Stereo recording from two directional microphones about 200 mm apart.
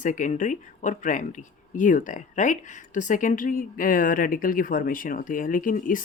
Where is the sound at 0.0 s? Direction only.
40° left (ahead or behind).